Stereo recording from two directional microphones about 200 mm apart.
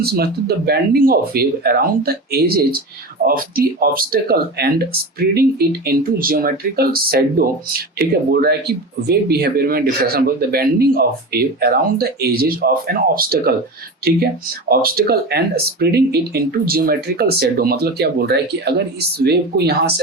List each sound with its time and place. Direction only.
0.0 s speech: 50° right (ahead or behind)
14.7 s speech: 50° right (ahead or behind)